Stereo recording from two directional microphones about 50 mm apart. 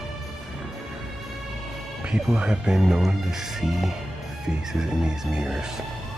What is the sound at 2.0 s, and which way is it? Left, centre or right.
Speech, centre.